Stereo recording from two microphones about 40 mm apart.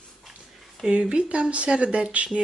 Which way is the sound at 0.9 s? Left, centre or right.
Right.